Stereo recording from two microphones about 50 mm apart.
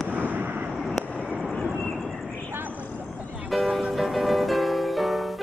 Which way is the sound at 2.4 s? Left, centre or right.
Right.